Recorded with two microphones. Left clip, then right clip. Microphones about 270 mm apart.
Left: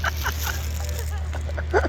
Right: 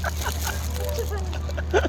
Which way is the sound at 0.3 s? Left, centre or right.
Centre.